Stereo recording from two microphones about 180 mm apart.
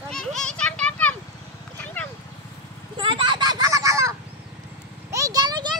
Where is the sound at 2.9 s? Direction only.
30° right (ahead or behind).